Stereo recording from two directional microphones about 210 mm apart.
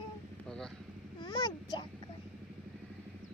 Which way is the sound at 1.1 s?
20° left (ahead or behind).